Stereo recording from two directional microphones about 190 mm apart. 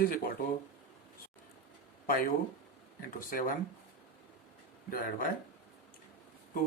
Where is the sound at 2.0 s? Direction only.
45° left (ahead or behind).